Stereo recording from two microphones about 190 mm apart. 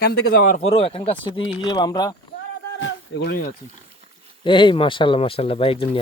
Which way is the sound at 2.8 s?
75° left (ahead or behind).